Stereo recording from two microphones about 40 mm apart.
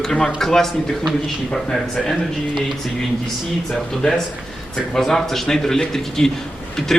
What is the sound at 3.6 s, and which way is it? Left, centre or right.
Speech, centre.